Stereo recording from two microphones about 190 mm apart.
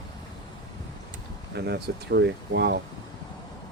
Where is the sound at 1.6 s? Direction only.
60° right (ahead or behind).